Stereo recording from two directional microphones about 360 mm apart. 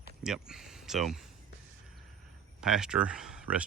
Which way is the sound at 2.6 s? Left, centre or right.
Centre.